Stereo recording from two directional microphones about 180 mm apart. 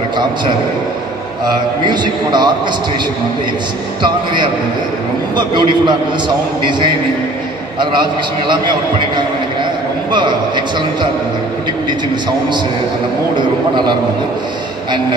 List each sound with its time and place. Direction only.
1.9 s a man's voice: 25° right (ahead or behind)
4.0 s a man's voice: 25° right (ahead or behind)